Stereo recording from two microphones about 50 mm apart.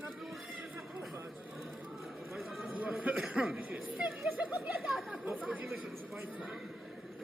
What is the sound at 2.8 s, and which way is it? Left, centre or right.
Speech, right.